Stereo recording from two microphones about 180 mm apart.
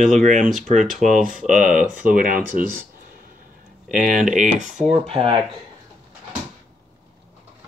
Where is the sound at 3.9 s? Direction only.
45° right (ahead or behind).